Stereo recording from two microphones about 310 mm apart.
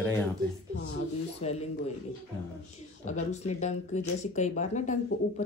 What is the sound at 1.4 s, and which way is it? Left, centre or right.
Speech, left.